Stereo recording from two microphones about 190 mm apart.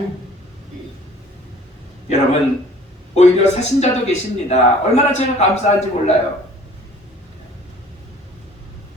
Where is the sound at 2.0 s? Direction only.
35° left (ahead or behind).